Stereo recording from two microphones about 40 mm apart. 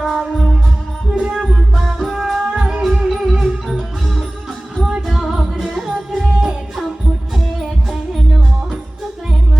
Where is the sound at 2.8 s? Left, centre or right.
Centre.